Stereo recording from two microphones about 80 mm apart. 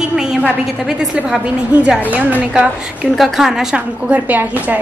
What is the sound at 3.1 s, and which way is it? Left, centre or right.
Speech, centre.